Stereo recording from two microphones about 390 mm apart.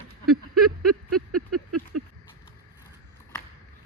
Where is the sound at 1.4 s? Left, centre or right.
Right.